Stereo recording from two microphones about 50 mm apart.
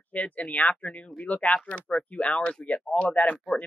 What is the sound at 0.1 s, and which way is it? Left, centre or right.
Speech, left.